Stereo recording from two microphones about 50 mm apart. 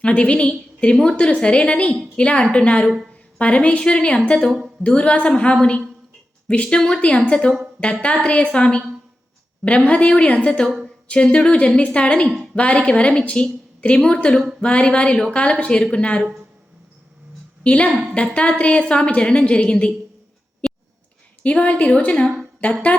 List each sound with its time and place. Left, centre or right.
0.0 s a woman's voice: left
17.6 s a woman's voice: left
21.4 s a woman's voice: left